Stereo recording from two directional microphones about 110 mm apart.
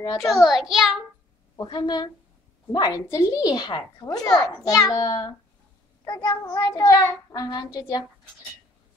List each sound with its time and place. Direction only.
0.0 s a child's voice: 35° left (ahead or behind)
0.3 s a child's voice: centre (ahead or behind)
1.6 s a child's voice: 40° left (ahead or behind)
6.0 s child singing: 30° left (ahead or behind)
6.4 s child singing: 15° left (ahead or behind)
6.8 s a child's voice: 25° left (ahead or behind)